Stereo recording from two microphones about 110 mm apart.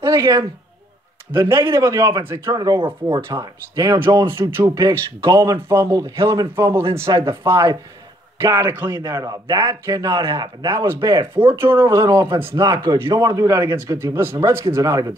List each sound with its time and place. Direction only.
0.0 s a man's voice: 30° right (ahead or behind)
4.3 s a man's voice: 20° right (ahead or behind)
9.0 s a man's voice: 35° right (ahead or behind)